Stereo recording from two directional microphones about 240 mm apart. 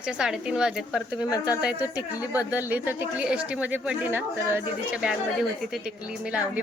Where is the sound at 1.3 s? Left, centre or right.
Centre.